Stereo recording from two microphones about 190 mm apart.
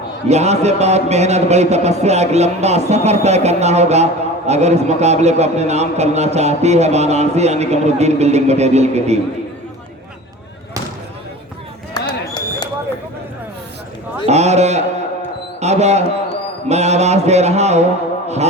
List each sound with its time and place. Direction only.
0.3 s speech: 35° right (ahead or behind)
11.9 s a sound: 25° left (ahead or behind)
14.3 s speech: 35° right (ahead or behind)